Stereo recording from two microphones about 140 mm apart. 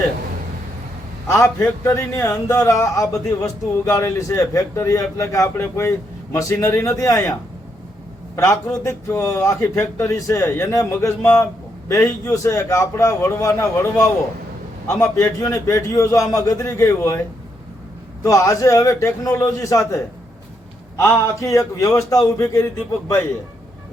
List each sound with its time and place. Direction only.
1.3 s a man's voice: 20° left (ahead or behind)
8.8 s a man's voice: 20° left (ahead or behind)
18.2 s a man's voice: 20° left (ahead or behind)